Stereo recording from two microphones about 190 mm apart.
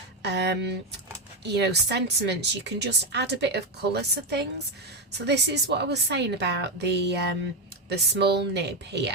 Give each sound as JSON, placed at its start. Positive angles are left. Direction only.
{"t": 0.2, "sound": "a woman's voice", "side_deg": -60}